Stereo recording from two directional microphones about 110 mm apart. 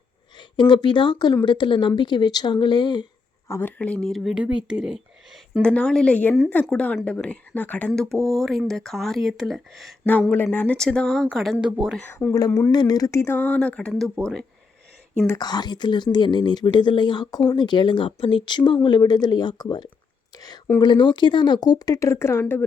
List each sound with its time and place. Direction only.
0.3 s speech: 45° left (ahead or behind)
3.5 s speech: 20° left (ahead or behind)
4.1 s speech: centre (ahead or behind)
5.6 s speech: 10° left (ahead or behind)
8.1 s speech: centre (ahead or behind)
10.1 s speech: 15° left (ahead or behind)
10.8 s speech: 5° left (ahead or behind)
11.9 s speech: 15° left (ahead or behind)
12.7 s speech: 40° left (ahead or behind); by 14.4 s 5° left (ahead or behind)
15.4 s speech: 40° left (ahead or behind); by 22.6 s 20° left (ahead or behind)